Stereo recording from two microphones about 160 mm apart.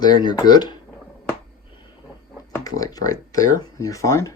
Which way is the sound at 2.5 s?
20° left (ahead or behind).